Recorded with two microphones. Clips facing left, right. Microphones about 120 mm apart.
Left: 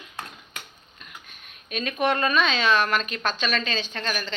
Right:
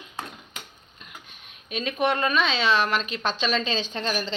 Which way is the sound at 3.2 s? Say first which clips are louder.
Right 1 dB; 25° right (ahead or behind).